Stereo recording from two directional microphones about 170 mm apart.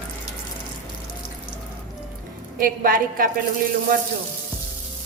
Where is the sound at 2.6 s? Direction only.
55° right (ahead or behind).